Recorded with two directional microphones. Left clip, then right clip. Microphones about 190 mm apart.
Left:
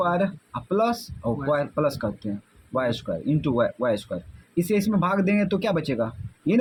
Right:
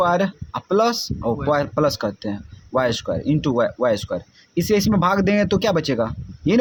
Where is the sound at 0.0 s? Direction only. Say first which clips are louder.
Right 5 dB; 35° right (ahead or behind).